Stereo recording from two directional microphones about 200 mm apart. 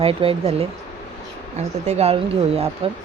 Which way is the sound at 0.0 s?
30° right (ahead or behind).